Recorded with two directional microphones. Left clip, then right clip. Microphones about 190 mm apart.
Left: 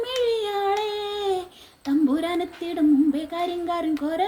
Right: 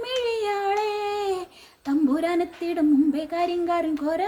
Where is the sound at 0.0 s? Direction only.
20° right (ahead or behind).